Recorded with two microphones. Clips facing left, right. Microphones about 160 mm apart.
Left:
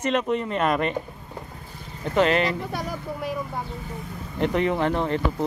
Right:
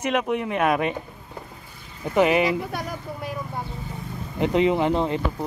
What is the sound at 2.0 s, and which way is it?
Speech, 10° right (ahead or behind).